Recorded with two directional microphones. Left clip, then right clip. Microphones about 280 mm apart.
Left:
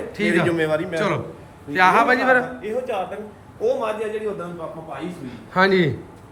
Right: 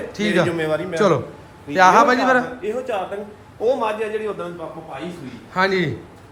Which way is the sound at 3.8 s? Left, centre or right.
Centre.